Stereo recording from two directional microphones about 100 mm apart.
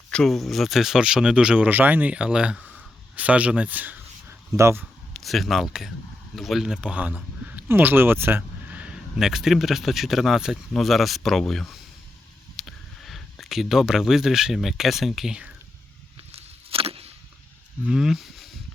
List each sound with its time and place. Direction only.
0.1 s speech: 5° left (ahead or behind); by 4.4 s 20° right (ahead or behind)
4.5 s speech: 30° right (ahead or behind)
5.1 s speech: centre (ahead or behind)
16.1 s a sound: 70° right (ahead or behind)
17.8 s speech: 5° right (ahead or behind)